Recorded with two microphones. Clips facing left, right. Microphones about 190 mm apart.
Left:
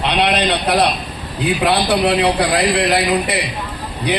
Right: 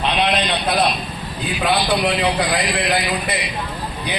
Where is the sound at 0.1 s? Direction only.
70° left (ahead or behind).